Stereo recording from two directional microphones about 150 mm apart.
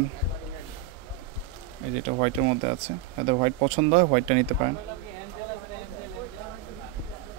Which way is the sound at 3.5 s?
45° right (ahead or behind).